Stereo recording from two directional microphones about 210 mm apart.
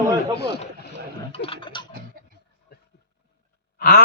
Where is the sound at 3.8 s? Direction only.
50° left (ahead or behind).